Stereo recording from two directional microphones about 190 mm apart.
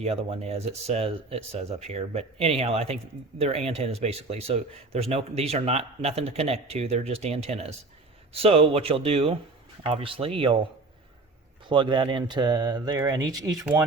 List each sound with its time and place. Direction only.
0.0 s speech: 35° right (ahead or behind)
11.7 s speech: 25° right (ahead or behind)